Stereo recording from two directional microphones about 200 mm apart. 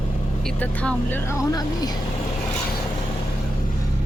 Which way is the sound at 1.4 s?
20° left (ahead or behind).